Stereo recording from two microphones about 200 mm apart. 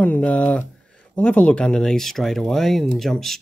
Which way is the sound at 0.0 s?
5° left (ahead or behind).